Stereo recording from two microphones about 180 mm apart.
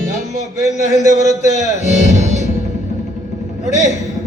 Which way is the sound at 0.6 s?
40° left (ahead or behind).